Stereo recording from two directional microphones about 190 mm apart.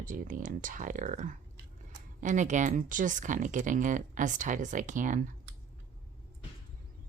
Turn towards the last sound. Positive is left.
turn(degrees=-45)  # may be behind; listen again after turning